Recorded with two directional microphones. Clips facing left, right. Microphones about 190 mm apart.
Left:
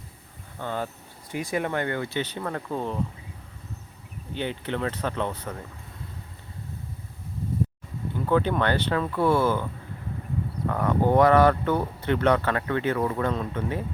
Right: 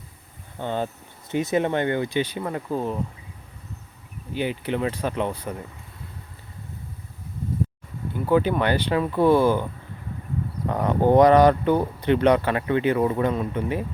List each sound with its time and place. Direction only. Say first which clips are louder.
0.6 s speech: right 4 dB; 20° right (ahead or behind)
4.4 s speech: right 4 dB; 10° right (ahead or behind)
8.3 s speech: right 3 dB; 10° right (ahead or behind)
10.7 s speech: right 3 dB; 20° right (ahead or behind)